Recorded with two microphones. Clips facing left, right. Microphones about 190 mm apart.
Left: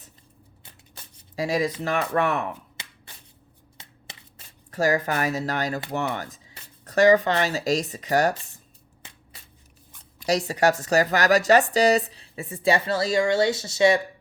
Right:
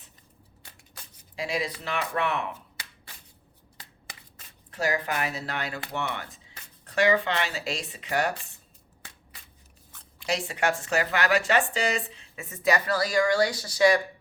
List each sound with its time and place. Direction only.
1.4 s speech: 40° left (ahead or behind)
3.8 s shuffling cards: 25° left (ahead or behind)
4.7 s speech: 45° left (ahead or behind)
10.2 s speech: 40° left (ahead or behind); by 14.0 s 25° left (ahead or behind)